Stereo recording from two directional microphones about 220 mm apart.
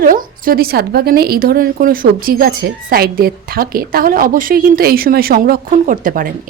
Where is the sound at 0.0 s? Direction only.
40° right (ahead or behind).